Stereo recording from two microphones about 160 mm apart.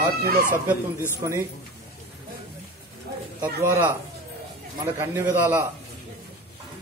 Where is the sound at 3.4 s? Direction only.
15° right (ahead or behind).